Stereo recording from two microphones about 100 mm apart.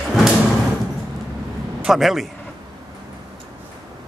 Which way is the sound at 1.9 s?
Centre (ahead or behind).